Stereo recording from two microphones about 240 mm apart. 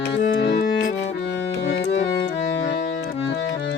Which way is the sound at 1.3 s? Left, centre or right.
Left.